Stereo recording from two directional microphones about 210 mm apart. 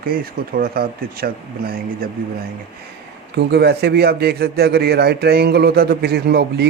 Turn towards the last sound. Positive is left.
turn(degrees=-50)  # may be behind; listen again after turning